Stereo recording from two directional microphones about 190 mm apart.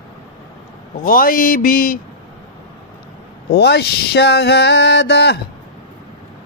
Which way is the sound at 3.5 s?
60° left (ahead or behind).